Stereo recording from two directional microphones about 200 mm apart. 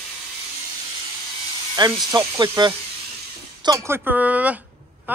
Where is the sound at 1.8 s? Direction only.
20° right (ahead or behind).